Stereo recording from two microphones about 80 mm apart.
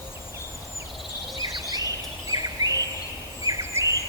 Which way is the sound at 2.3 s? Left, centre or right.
Right.